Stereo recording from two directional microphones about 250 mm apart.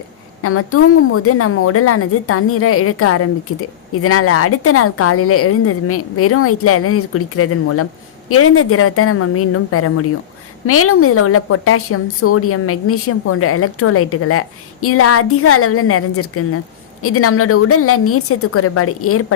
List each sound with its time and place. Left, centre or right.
0.4 s a woman's voice: left